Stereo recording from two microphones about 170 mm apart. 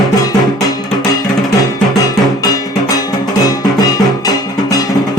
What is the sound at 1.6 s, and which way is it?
Music, 20° left (ahead or behind).